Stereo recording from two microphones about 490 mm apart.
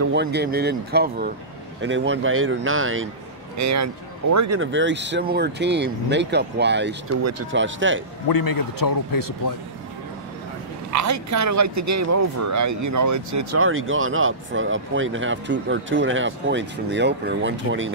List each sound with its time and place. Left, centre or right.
0.0 s speech: right
8.3 s a man's voice: left
10.9 s speech: right